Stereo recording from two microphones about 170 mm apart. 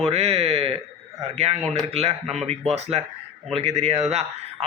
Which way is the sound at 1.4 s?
40° right (ahead or behind).